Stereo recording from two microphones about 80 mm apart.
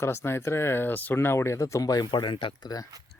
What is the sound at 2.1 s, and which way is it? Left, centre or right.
Speech, left.